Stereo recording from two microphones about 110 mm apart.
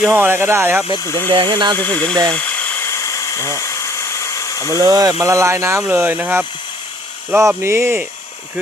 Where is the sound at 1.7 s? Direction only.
15° left (ahead or behind).